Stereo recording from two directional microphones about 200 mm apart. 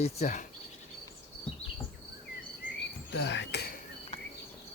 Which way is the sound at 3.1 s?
60° left (ahead or behind).